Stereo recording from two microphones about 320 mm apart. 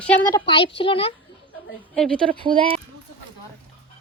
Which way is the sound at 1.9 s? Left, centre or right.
Centre.